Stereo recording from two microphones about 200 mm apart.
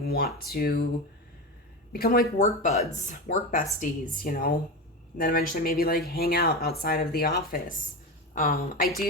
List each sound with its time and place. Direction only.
0.0 s speech: 50° left (ahead or behind)
1.9 s a woman's voice: 50° left (ahead or behind)